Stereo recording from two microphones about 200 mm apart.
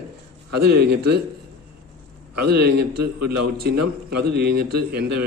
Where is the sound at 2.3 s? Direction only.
50° right (ahead or behind).